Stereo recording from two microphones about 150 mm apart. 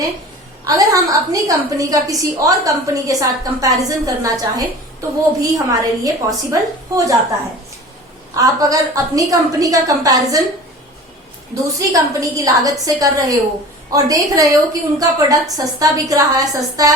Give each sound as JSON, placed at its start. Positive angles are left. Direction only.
{"t": 0.6, "sound": "a woman's voice", "side_deg": -25}
{"t": 8.4, "sound": "a woman's voice", "side_deg": -20}
{"t": 11.9, "sound": "a woman's voice", "side_deg": -20}